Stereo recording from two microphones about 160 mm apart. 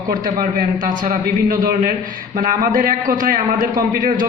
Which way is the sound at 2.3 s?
55° right (ahead or behind).